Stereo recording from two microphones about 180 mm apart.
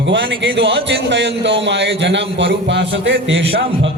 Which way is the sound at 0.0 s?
90° right.